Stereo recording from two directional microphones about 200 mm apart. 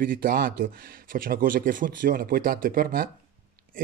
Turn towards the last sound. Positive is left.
turn(degrees=-45)  # may be behind; listen again after turning